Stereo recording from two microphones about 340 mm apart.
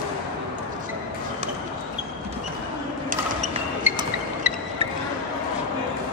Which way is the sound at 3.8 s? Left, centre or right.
Centre.